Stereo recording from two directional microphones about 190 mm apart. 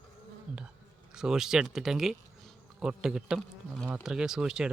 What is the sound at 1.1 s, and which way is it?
A man's voice, 5° right (ahead or behind).